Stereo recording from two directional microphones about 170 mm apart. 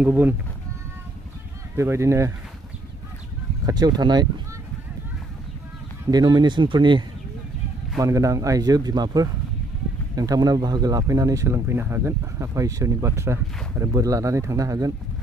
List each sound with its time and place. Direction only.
0.0 s speech: 10° right (ahead or behind)
1.8 s speech: 15° right (ahead or behind)
3.6 s speech: 25° right (ahead or behind)
6.0 s speech: 25° right (ahead or behind)